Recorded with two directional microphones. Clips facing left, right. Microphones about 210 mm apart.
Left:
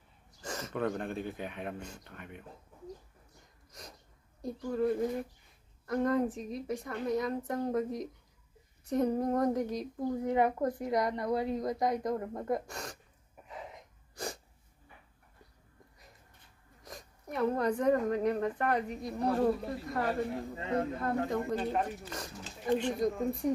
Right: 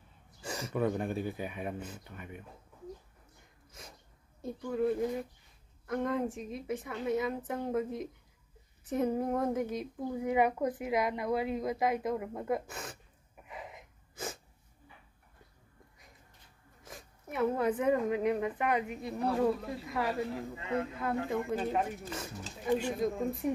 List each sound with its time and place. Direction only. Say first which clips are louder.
0.4 s speech: right 2 dB; 10° right (ahead or behind)
4.4 s a woman's voice: even; centre (ahead or behind)
16.8 s a woman's voice: left 2 dB; 5° right (ahead or behind)
20.5 s speech: left 2 dB; 35° left (ahead or behind)
21.3 s a woman's voice: even; 5° right (ahead or behind)